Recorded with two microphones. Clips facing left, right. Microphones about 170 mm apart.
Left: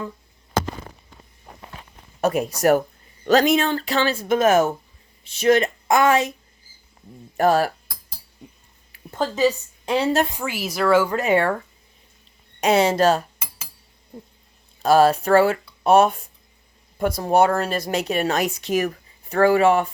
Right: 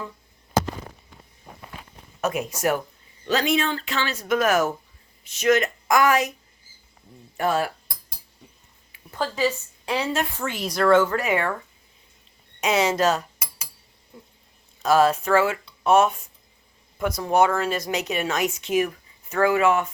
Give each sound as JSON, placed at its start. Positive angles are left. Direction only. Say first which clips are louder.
{"t": 2.2, "sound": "speech", "louder": "left 5 dB", "side_deg": 35}
{"t": 7.3, "sound": "speech", "louder": "left 5 dB", "side_deg": 40}
{"t": 9.0, "sound": "a woman's voice", "louder": "left 4 dB", "side_deg": 20}
{"t": 10.2, "sound": "speech", "louder": "left 1 dB", "side_deg": 10}
{"t": 11.2, "sound": "speech", "louder": "left 5 dB", "side_deg": 30}
{"t": 12.5, "sound": "speech", "louder": "left 4 dB", "side_deg": 35}
{"t": 14.8, "sound": "speech", "louder": "left 3 dB", "side_deg": 35}